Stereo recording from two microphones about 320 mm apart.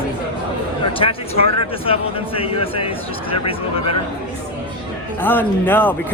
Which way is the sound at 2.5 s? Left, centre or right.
Centre.